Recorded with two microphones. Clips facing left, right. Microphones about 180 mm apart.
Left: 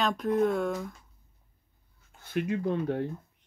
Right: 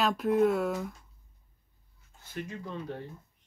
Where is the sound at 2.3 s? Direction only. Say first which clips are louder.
Left 10 dB; 65° left (ahead or behind).